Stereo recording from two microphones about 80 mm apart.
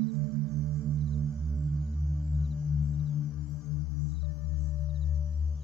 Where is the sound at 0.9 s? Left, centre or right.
Centre.